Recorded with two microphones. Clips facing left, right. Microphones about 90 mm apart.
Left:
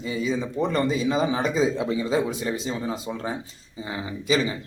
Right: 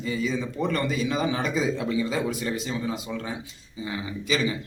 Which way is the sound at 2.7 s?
35° left (ahead or behind).